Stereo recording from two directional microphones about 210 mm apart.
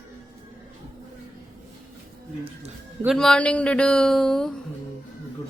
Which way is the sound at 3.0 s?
Centre (ahead or behind).